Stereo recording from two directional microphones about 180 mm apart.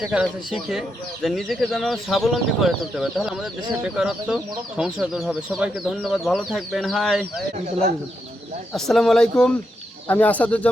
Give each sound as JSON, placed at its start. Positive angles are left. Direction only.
{"t": 0.0, "sound": "speech", "side_deg": -5}
{"t": 8.7, "sound": "speech", "side_deg": 0}